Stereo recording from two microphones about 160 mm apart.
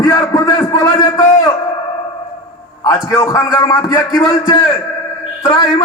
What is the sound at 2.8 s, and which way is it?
A man's voice, 20° left (ahead or behind).